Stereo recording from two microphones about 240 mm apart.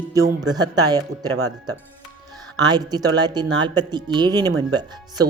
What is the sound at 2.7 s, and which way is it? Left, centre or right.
Speech, centre.